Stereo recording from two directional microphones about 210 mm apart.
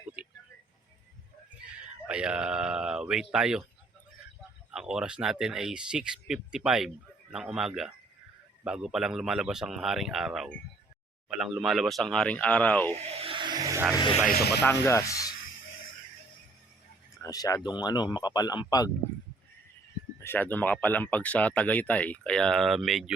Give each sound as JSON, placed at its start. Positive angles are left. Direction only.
{"t": 0.2, "sound": "a sound", "side_deg": -5}
{"t": 2.0, "sound": "speech", "side_deg": -5}
{"t": 4.7, "sound": "speech", "side_deg": -5}
{"t": 13.1, "sound": "a sound", "side_deg": -25}
{"t": 13.9, "sound": "speech", "side_deg": 20}
{"t": 14.3, "sound": "speech", "side_deg": 45}
{"t": 14.6, "sound": "speech", "side_deg": 15}
{"t": 17.2, "sound": "speech", "side_deg": 15}
{"t": 20.1, "sound": "speech", "side_deg": 10}